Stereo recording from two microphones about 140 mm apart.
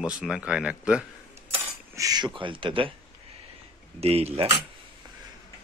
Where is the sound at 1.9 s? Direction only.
25° right (ahead or behind).